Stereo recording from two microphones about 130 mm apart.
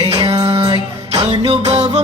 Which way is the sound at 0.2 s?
55° right (ahead or behind).